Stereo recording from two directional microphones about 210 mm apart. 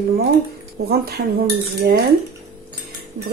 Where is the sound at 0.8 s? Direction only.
45° right (ahead or behind).